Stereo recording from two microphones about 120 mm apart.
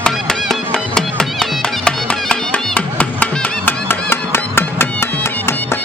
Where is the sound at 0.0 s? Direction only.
5° left (ahead or behind).